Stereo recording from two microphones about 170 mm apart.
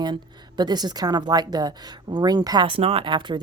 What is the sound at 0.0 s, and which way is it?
Speech, 25° right (ahead or behind).